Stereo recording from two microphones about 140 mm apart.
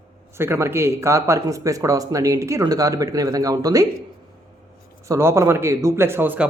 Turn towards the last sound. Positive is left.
turn(degrees=-15)  # may be behind; listen again after turning